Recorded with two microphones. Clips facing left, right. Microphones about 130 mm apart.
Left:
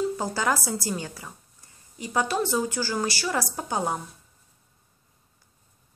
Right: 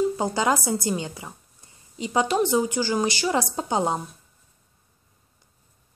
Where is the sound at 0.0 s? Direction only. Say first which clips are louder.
Right 3 dB; 20° right (ahead or behind).